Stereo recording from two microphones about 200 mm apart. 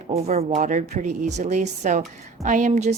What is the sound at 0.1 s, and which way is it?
A woman's voice, 30° right (ahead or behind).